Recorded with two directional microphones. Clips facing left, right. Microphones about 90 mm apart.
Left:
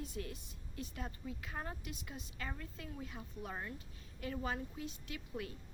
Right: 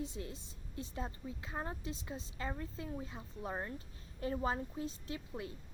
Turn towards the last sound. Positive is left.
turn(degrees=-25)  # may be behind; listen again after turning